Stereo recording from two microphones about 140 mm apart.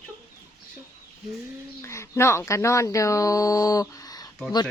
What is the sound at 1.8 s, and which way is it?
Speech, 20° left (ahead or behind).